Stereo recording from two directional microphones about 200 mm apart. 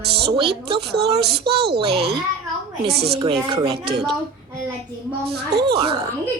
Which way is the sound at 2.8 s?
55° right (ahead or behind).